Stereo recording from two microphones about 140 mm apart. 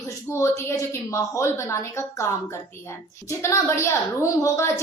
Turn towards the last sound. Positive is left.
turn(degrees=20)  # may be behind; listen again after turning